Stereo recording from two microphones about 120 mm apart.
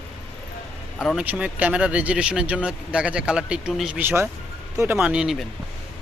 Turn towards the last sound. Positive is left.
turn(degrees=-5)  # may be behind; listen again after turning